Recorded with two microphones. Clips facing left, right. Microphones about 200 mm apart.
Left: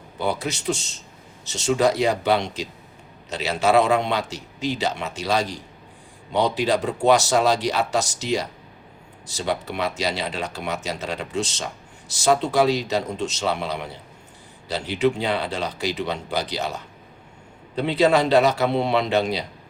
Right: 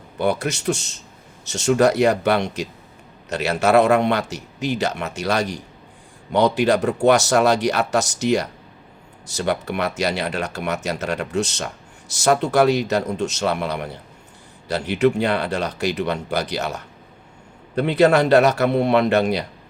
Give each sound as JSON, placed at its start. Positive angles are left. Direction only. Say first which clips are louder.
{"t": 0.2, "sound": "a man's voice", "louder": "right 4 dB", "side_deg": -65}
{"t": 6.6, "sound": "a man's voice", "louder": "right 4 dB", "side_deg": -65}